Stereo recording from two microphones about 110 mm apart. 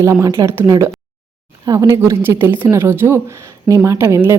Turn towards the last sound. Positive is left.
turn(degrees=-25)  # may be behind; listen again after turning